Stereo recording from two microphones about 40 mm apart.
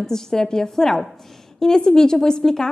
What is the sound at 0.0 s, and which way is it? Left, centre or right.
A woman's voice, centre.